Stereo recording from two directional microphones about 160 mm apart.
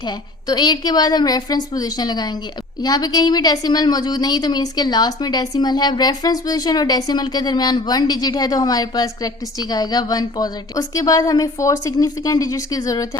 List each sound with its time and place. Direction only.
0.4 s a woman's voice: 25° left (ahead or behind)